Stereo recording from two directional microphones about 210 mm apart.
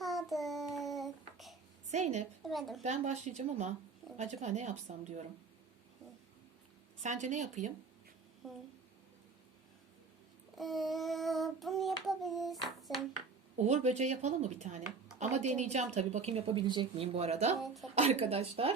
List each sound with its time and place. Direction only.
0.0 s child singing: centre (ahead or behind)
1.9 s a woman's voice: 35° right (ahead or behind)
2.4 s a woman's voice: centre (ahead or behind)
2.8 s a woman's voice: 35° right (ahead or behind)
7.0 s a woman's voice: 35° right (ahead or behind)
8.4 s child singing: centre (ahead or behind)
10.6 s child singing: centre (ahead or behind)
13.6 s a woman's voice: 30° right (ahead or behind)